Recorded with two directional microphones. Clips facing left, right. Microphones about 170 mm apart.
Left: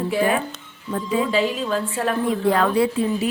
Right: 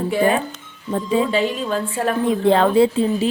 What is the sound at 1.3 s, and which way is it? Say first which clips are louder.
Speech: right 1 dB; centre (ahead or behind).